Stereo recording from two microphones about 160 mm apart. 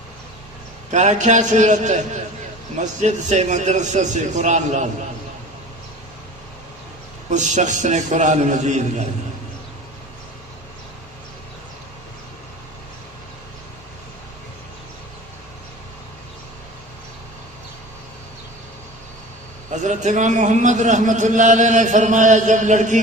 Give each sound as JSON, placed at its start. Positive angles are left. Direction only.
{"t": 0.9, "sound": "a man's voice", "side_deg": -50}
{"t": 7.3, "sound": "a man's voice", "side_deg": -50}
{"t": 19.7, "sound": "a man's voice", "side_deg": -50}